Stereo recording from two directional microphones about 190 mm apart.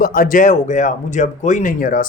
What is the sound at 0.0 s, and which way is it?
Speech, 45° left (ahead or behind).